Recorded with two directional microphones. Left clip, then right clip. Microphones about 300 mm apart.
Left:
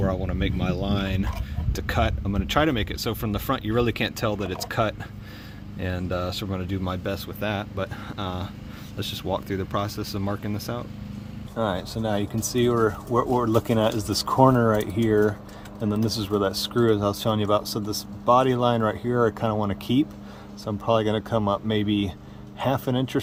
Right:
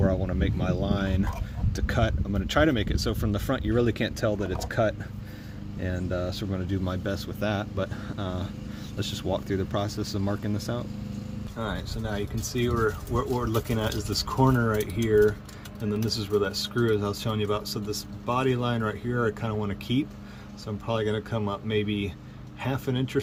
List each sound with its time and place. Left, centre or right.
0.0 s speech: centre
11.6 s speech: left